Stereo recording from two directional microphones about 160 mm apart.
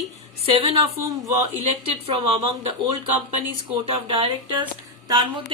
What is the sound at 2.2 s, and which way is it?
Speech, 40° right (ahead or behind).